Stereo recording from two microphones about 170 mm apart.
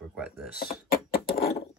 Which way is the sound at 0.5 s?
60° left (ahead or behind).